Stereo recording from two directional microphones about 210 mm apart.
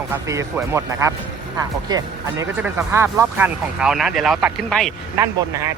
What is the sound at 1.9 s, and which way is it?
Speech, 20° right (ahead or behind).